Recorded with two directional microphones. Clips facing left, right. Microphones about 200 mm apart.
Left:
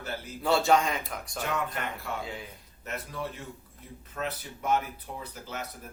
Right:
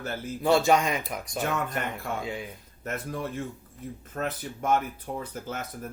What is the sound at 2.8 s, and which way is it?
Speech, 50° right (ahead or behind).